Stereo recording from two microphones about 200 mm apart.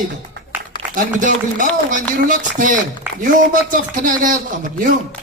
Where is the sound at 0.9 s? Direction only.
40° right (ahead or behind).